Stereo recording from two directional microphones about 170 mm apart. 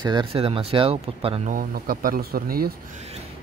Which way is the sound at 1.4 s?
60° right (ahead or behind).